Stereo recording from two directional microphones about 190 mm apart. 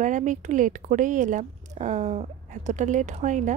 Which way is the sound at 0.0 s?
40° right (ahead or behind).